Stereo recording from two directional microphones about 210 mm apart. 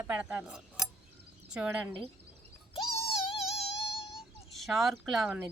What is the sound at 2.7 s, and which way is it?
Cat, 25° left (ahead or behind).